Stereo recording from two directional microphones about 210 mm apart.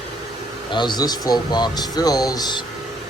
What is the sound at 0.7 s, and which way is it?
Speech, 20° left (ahead or behind).